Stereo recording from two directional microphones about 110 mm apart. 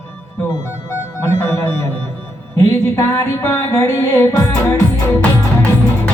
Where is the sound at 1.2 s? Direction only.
25° left (ahead or behind).